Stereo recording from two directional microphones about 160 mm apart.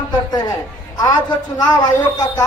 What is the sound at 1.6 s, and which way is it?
Speech, 25° left (ahead or behind).